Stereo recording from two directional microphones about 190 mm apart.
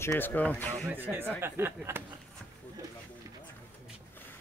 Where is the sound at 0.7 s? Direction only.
10° right (ahead or behind).